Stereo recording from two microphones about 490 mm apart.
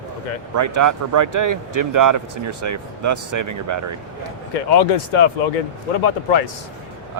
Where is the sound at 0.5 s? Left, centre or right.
Right.